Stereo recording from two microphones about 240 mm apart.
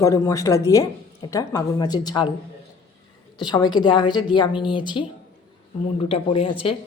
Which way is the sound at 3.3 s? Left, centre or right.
Centre.